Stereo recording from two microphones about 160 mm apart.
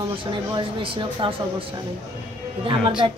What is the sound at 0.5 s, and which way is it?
Speech, 30° right (ahead or behind).